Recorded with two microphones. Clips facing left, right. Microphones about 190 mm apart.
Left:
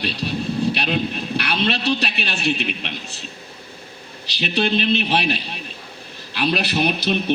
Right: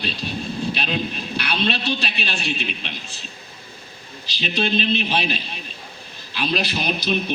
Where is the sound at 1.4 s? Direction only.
60° left (ahead or behind).